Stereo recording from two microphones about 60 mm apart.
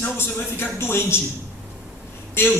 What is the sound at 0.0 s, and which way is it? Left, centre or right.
Speech, left.